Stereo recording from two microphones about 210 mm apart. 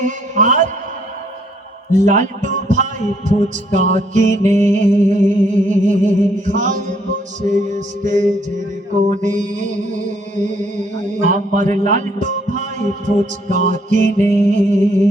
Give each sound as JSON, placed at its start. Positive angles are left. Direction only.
{"t": 0.0, "sound": "a man's voice", "side_deg": -35}
{"t": 1.9, "sound": "music", "side_deg": -35}